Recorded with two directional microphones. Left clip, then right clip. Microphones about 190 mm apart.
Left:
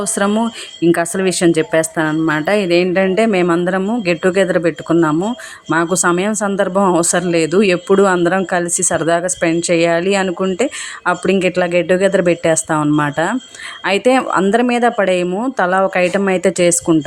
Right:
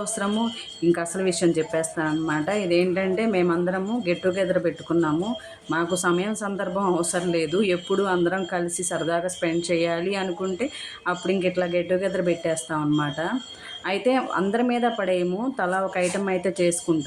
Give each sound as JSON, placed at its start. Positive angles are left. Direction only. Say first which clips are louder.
{"t": 0.0, "sound": "speech", "louder": "left 10 dB", "side_deg": 50}